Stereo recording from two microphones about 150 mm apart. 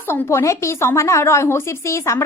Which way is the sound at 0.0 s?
15° left (ahead or behind).